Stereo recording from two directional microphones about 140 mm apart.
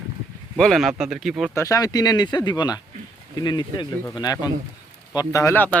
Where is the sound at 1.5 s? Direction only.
25° left (ahead or behind).